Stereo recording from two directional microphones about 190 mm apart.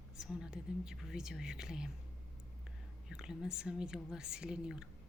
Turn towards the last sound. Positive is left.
turn(degrees=-5)  # may be behind; listen again after turning